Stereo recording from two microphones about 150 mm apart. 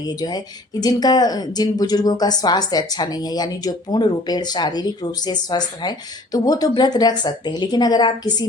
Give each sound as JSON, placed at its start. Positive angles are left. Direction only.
{"t": 0.0, "sound": "speech", "side_deg": 25}